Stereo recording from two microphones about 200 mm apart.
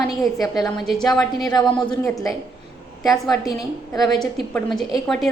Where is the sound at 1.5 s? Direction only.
20° left (ahead or behind).